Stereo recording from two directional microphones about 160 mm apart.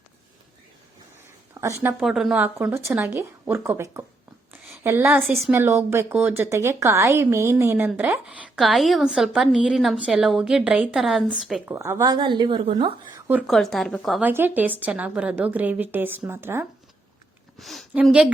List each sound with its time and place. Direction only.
1.5 s speech: 20° right (ahead or behind)
2.0 s a woman's voice: centre (ahead or behind)
4.5 s a sound: 15° right (ahead or behind)
5.2 s a woman's voice: centre (ahead or behind)
5.5 s a woman's voice: 15° right (ahead or behind)
8.5 s a woman's voice: centre (ahead or behind)
11.7 s a woman's voice: 20° right (ahead or behind)
13.1 s a sound: 15° right (ahead or behind)
13.5 s a woman's voice: centre (ahead or behind)
14.2 s a woman's voice: 10° right (ahead or behind)
17.6 s a woman's voice: centre (ahead or behind)